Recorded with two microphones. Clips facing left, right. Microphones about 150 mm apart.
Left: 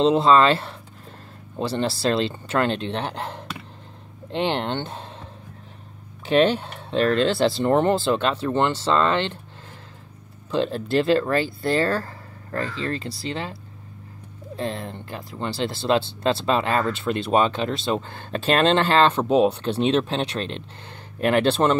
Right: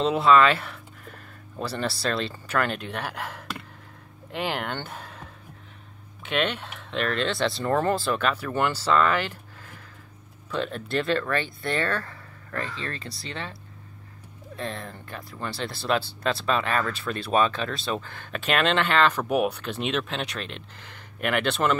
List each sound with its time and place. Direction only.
0.0 s speech: 30° left (ahead or behind)
6.2 s speech: 35° left (ahead or behind)
10.5 s speech: 30° left (ahead or behind)